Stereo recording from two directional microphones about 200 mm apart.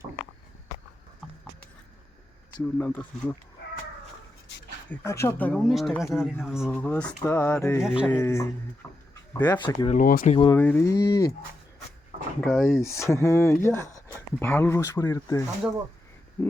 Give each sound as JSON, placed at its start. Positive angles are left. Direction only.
{"t": 2.7, "sound": "speech", "side_deg": 10}
{"t": 4.9, "sound": "speech", "side_deg": 15}
{"t": 7.8, "sound": "speech", "side_deg": -5}
{"t": 8.1, "sound": "speech", "side_deg": 15}
{"t": 8.8, "sound": "a sound", "side_deg": 10}
{"t": 9.4, "sound": "speech", "side_deg": 20}
{"t": 9.9, "sound": "speech", "side_deg": 45}
{"t": 10.3, "sound": "speech", "side_deg": 25}
{"t": 10.6, "sound": "speech", "side_deg": 10}
{"t": 12.4, "sound": "speech", "side_deg": 0}
{"t": 12.6, "sound": "speech", "side_deg": 15}